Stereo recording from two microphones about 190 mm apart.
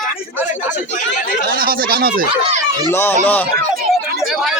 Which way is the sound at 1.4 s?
50° right (ahead or behind).